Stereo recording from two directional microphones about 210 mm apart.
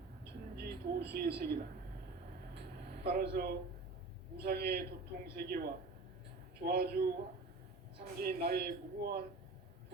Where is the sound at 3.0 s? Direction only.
50° right (ahead or behind).